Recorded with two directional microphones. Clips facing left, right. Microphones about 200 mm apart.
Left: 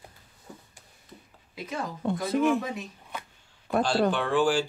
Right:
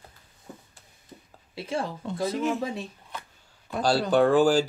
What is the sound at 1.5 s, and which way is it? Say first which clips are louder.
Speech: right 4 dB; 30° right (ahead or behind).